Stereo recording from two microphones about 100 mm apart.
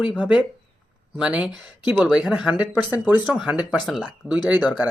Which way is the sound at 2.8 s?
20° right (ahead or behind).